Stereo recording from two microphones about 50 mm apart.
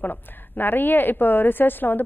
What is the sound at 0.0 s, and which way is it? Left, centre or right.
A woman's voice, left.